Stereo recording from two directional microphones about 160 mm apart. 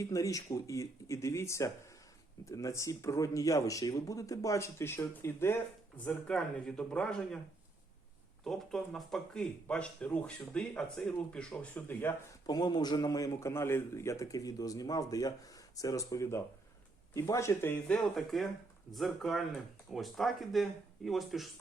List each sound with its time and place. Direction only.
0.0 s a man's voice: 20° left (ahead or behind); by 7.3 s 5° left (ahead or behind)
8.4 s speech: centre (ahead or behind)
12.5 s a man's voice: 25° left (ahead or behind); by 21.4 s centre (ahead or behind)